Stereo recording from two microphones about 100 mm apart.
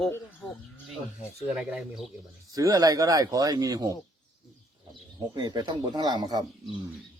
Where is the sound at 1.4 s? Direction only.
10° right (ahead or behind).